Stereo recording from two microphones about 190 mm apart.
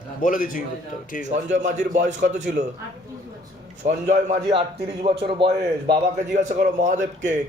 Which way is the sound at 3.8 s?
40° right (ahead or behind).